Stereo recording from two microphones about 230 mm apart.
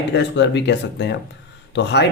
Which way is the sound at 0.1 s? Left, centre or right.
Left.